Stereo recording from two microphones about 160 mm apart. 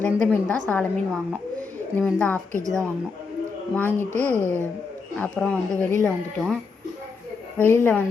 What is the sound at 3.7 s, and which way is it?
Speech, 10° left (ahead or behind).